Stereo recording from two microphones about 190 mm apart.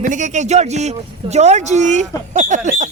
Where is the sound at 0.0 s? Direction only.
40° right (ahead or behind).